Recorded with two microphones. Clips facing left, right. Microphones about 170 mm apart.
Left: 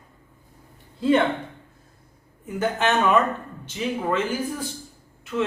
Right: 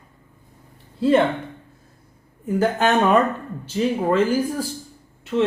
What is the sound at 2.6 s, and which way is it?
Speech, 35° right (ahead or behind).